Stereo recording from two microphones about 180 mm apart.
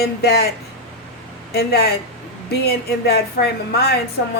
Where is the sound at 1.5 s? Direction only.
60° left (ahead or behind).